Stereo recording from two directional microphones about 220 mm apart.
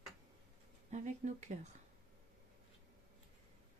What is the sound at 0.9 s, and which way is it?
Speech, 35° right (ahead or behind).